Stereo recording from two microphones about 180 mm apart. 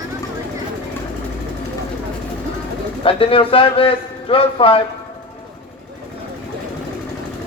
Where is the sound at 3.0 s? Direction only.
30° left (ahead or behind).